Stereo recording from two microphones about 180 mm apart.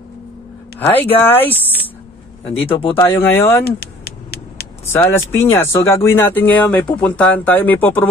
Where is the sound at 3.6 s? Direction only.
60° left (ahead or behind).